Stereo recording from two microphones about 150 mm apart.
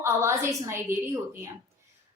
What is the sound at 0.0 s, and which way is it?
A woman's voice, 15° right (ahead or behind).